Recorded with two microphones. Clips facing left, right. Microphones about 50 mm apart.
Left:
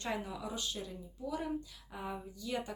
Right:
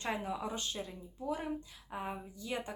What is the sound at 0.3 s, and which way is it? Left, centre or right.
Speech, right.